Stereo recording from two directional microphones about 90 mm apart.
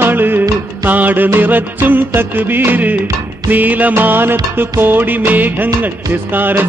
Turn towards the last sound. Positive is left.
turn(degrees=-20)  # may be behind; listen again after turning